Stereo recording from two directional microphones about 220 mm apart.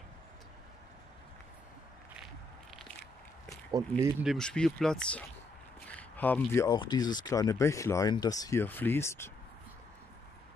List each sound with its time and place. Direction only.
4.0 s speech: centre (ahead or behind)